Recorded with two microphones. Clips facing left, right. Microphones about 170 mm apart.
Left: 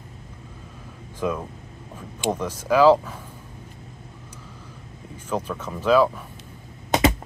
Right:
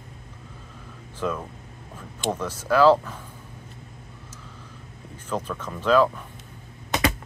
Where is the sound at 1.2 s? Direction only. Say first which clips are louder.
Left 2 dB; 10° left (ahead or behind).